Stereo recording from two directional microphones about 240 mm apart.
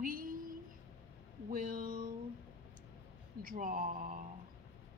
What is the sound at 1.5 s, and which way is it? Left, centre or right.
Speech, right.